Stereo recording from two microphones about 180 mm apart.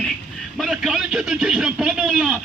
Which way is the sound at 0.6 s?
Centre (ahead or behind).